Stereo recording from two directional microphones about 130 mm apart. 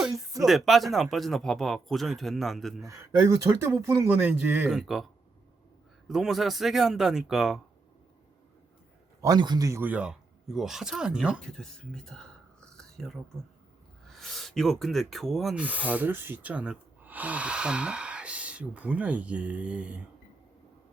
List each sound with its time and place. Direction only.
0.4 s speech: centre (ahead or behind)
2.8 s speech: 25° right (ahead or behind); by 5.0 s centre (ahead or behind)
6.1 s speech: 5° right (ahead or behind)
9.2 s a man's voice: 30° right (ahead or behind)
9.8 s speech: 10° right (ahead or behind)
15.6 s speech: 10° right (ahead or behind)